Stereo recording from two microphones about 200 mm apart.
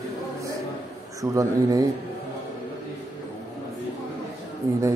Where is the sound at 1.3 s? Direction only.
15° right (ahead or behind).